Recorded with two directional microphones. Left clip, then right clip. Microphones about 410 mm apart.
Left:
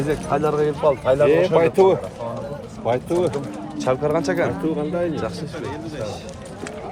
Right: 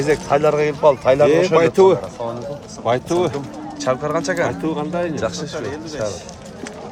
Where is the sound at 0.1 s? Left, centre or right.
Centre.